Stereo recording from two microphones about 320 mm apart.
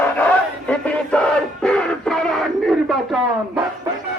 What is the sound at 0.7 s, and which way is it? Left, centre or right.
Music, centre.